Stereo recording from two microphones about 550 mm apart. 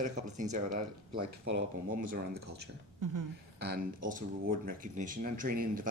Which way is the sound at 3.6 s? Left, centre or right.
Centre.